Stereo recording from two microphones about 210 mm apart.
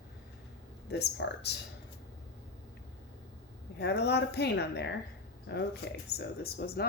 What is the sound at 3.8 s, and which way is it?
Speech, 55° left (ahead or behind).